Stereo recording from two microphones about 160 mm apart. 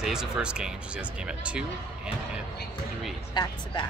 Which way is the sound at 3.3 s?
25° left (ahead or behind).